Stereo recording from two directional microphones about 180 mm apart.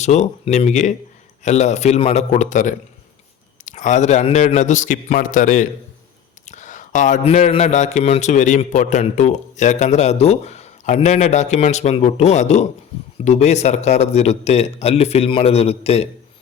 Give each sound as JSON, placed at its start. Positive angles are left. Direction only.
{"t": 0.0, "sound": "speech", "side_deg": 40}